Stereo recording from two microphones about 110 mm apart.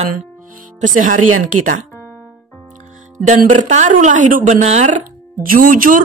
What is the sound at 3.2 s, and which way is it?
Speech, 90° right.